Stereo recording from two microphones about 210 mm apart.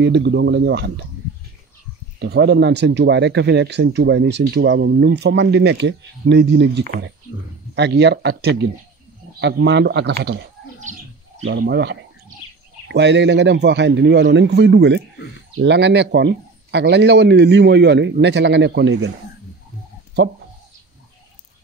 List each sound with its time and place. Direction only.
0.0 s speech: 55° right (ahead or behind)
2.1 s speech: 55° right (ahead or behind)
10.8 s bird: 35° right (ahead or behind)
11.6 s speech: 55° right (ahead or behind)